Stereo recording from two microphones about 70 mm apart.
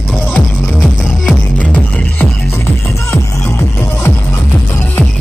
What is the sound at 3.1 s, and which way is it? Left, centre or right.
Music, left.